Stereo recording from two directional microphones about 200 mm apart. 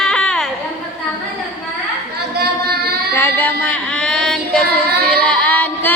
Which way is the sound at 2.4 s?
50° right (ahead or behind).